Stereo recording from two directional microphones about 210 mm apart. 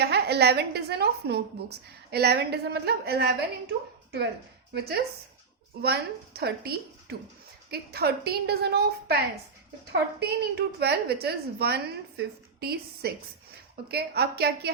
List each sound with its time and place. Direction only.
0.0 s a woman's voice: 50° right (ahead or behind)
4.7 s a woman's voice: 50° right (ahead or behind)